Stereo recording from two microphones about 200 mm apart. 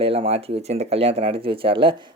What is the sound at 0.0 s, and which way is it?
Speech, 30° right (ahead or behind).